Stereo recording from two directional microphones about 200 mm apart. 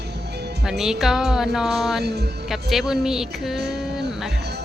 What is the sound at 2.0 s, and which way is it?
Music, 55° right (ahead or behind).